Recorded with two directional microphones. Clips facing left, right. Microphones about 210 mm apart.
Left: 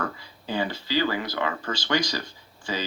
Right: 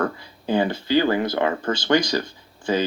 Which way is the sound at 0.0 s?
55° right (ahead or behind).